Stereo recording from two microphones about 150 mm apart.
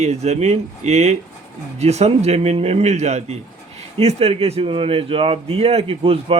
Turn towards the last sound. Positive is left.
turn(degrees=-40)  # may be behind; listen again after turning